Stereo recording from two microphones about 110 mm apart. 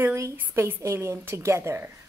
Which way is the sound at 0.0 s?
20° right (ahead or behind).